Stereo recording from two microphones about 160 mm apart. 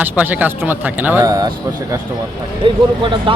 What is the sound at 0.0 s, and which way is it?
A man's voice, 10° right (ahead or behind).